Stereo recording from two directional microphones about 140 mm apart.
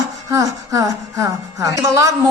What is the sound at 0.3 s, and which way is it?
Speech, 25° right (ahead or behind).